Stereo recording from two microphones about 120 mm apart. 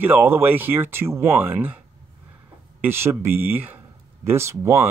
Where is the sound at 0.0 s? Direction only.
15° right (ahead or behind).